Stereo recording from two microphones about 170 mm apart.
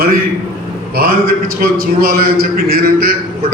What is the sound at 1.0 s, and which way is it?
A man's voice, 60° right (ahead or behind).